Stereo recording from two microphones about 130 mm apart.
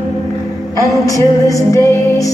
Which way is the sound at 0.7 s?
25° left (ahead or behind).